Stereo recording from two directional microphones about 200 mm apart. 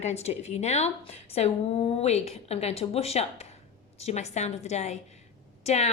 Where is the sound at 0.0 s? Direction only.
35° left (ahead or behind).